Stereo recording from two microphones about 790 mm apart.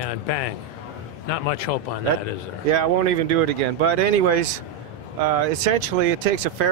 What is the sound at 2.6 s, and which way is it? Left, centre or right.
Speech, right.